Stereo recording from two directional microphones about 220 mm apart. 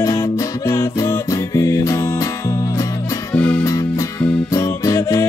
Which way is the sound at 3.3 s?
5° left (ahead or behind).